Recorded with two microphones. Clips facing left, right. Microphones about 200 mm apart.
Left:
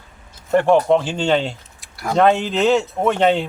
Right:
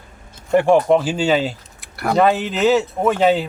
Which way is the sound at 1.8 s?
60° right (ahead or behind).